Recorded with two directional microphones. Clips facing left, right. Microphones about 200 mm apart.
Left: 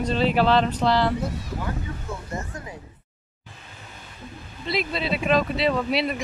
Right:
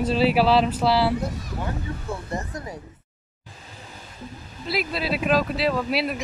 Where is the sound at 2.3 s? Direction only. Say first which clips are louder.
Right 2 dB; 35° right (ahead or behind).